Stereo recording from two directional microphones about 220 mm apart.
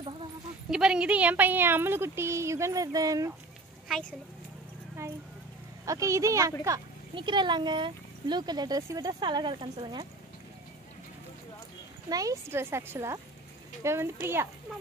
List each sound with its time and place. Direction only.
0.7 s speech: 5° right (ahead or behind)
5.9 s speech: 15° right (ahead or behind)
12.1 s speech: 15° right (ahead or behind)